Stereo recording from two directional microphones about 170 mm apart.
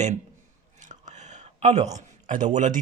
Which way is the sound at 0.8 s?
45° right (ahead or behind).